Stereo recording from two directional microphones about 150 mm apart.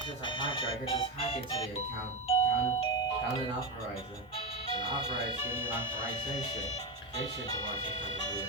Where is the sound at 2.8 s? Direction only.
30° left (ahead or behind).